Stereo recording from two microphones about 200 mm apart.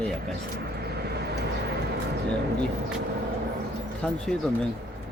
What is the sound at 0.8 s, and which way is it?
Vehicle, 55° right (ahead or behind).